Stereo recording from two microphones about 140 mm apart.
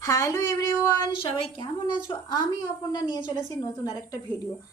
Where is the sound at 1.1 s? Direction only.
40° left (ahead or behind).